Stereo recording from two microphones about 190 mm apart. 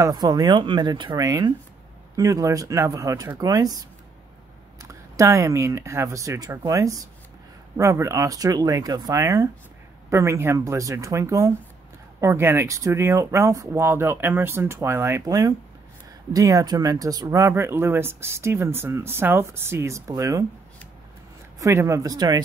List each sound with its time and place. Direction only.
0.0 s speech: 20° right (ahead or behind)
4.8 s speech: 15° right (ahead or behind)
21.5 s speech: 15° right (ahead or behind)